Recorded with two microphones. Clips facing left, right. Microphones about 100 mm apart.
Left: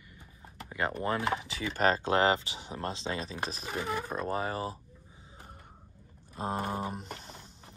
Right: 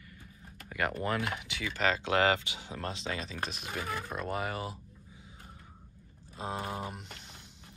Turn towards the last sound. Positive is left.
turn(degrees=40)  # may be behind; listen again after turning